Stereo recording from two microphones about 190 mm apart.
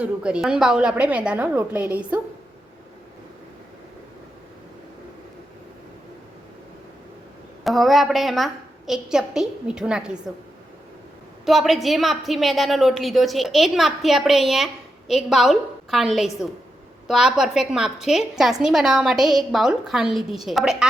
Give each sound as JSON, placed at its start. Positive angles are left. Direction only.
{"t": 0.0, "sound": "a woman's voice", "side_deg": -5}
{"t": 7.6, "sound": "a woman's voice", "side_deg": 0}
{"t": 11.4, "sound": "a woman's voice", "side_deg": 0}